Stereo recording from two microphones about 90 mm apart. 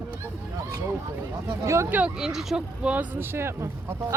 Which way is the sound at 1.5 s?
35° right (ahead or behind).